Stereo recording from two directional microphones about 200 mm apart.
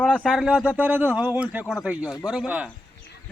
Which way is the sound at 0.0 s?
5° left (ahead or behind).